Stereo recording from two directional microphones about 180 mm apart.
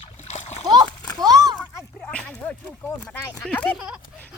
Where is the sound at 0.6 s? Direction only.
25° right (ahead or behind).